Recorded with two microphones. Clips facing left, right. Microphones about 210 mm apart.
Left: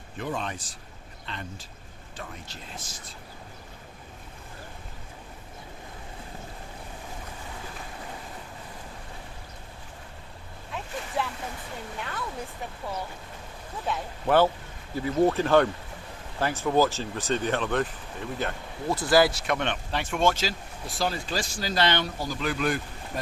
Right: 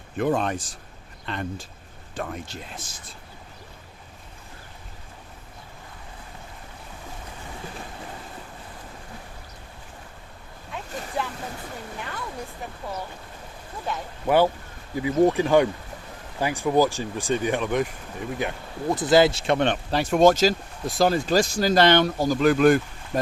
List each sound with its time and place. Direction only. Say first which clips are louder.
0.2 s speech: right 9 dB; 50° right (ahead or behind)
11.2 s vehicle: right 1 dB; centre (ahead or behind)
13.9 s speech: even; centre (ahead or behind)
14.3 s speech: right 2 dB; 10° right (ahead or behind); by 23.2 s 50° right (ahead or behind)